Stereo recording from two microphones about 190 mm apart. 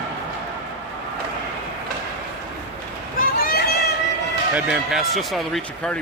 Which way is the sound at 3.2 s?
50° left (ahead or behind).